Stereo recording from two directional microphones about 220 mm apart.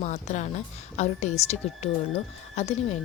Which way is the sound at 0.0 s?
30° left (ahead or behind).